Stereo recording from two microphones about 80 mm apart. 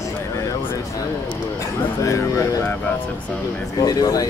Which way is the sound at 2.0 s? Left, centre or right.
Left.